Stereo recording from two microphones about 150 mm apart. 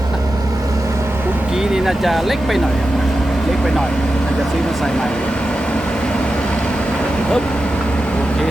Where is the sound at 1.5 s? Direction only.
5° right (ahead or behind).